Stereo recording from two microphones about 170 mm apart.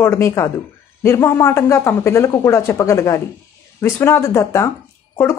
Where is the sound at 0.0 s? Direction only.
15° left (ahead or behind).